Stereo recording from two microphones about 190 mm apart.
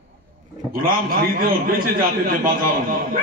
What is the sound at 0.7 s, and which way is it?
A man's voice, 50° right (ahead or behind).